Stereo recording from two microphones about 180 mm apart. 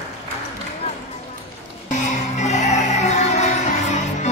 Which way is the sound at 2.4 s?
40° left (ahead or behind).